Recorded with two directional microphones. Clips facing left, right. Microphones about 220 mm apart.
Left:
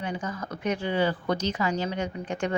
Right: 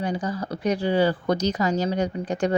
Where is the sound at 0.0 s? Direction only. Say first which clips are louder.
Right 5 dB; 35° right (ahead or behind).